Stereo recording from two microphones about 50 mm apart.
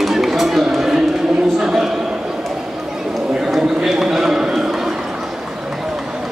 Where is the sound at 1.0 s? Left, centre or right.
Centre.